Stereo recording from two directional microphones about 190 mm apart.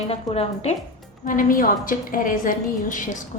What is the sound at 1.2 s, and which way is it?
A woman's voice, 45° left (ahead or behind).